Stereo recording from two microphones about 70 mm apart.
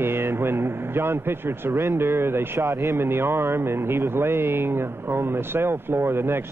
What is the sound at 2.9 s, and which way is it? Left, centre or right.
Speech, right.